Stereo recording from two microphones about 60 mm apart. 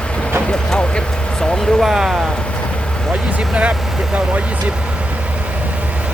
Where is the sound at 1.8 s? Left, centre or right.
Centre.